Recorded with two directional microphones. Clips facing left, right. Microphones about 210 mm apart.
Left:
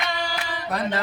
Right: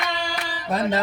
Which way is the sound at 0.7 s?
25° right (ahead or behind).